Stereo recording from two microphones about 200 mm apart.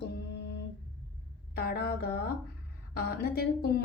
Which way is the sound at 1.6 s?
50° left (ahead or behind).